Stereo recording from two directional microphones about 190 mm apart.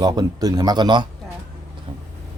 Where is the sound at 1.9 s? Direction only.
25° right (ahead or behind).